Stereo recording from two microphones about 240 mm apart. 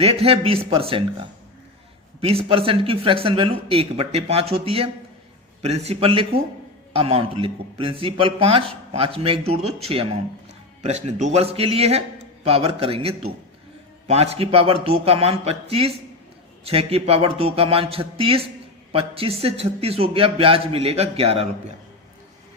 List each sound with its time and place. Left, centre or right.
0.0 s a man's voice: right
2.2 s a man's voice: right